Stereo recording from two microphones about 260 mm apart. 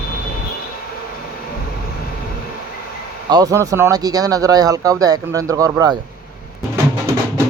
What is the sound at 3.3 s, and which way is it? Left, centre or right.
Speech, centre.